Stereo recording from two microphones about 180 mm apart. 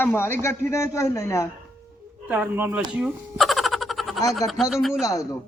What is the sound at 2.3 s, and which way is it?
Speech, 10° right (ahead or behind).